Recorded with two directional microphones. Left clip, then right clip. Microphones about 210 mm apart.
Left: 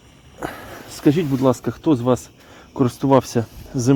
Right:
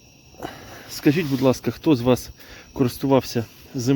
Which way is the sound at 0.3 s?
15° left (ahead or behind).